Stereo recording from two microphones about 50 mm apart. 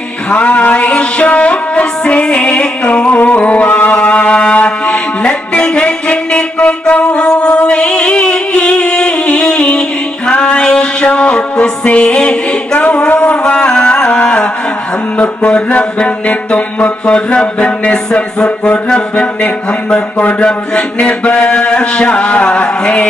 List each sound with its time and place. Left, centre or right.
0.3 s music: left
15.1 s mantra: left